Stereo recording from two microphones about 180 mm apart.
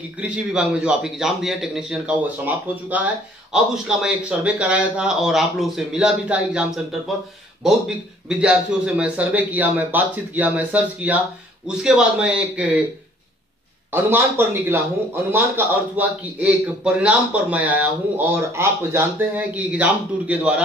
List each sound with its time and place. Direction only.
0.2 s a man's voice: 5° right (ahead or behind)
8.3 s speech: 5° right (ahead or behind)
14.1 s speech: 10° right (ahead or behind)